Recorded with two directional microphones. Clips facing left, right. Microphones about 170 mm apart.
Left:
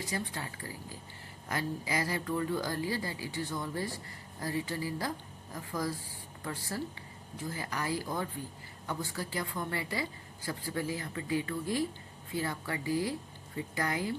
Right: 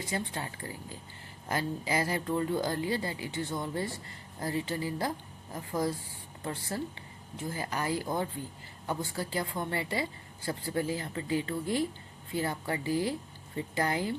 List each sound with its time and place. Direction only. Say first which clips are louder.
0.0 s a woman's voice: right 2 dB; 25° right (ahead or behind)